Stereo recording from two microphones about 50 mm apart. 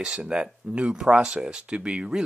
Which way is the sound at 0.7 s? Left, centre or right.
Right.